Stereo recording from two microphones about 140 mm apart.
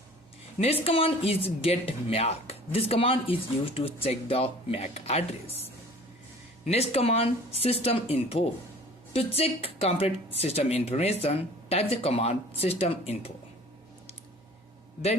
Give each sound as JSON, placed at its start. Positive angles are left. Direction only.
{"t": 0.6, "sound": "speech", "side_deg": 45}
{"t": 6.7, "sound": "speech", "side_deg": 50}